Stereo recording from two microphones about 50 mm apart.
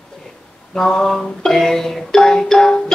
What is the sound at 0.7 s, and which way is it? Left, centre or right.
Music, centre.